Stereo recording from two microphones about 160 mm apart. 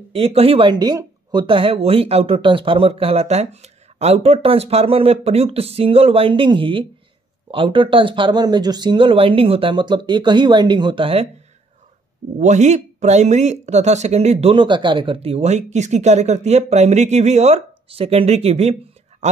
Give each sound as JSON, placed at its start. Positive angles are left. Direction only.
{"t": 0.1, "sound": "speech", "side_deg": -40}
{"t": 12.4, "sound": "speech", "side_deg": -45}